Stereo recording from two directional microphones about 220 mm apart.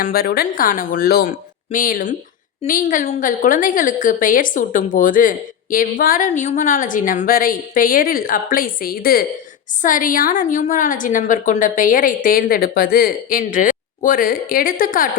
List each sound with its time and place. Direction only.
0.0 s a woman's voice: 45° left (ahead or behind)